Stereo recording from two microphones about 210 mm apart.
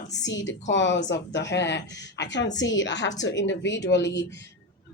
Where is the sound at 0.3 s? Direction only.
60° left (ahead or behind).